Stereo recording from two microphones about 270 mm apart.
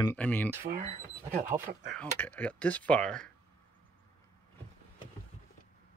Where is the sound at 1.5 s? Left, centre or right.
Centre.